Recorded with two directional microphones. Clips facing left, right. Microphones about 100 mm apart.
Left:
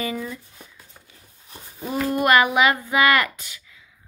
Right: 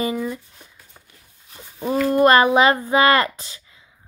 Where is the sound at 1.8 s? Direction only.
25° right (ahead or behind).